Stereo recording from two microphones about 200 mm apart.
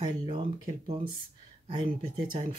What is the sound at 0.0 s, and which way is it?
Speech, 25° right (ahead or behind).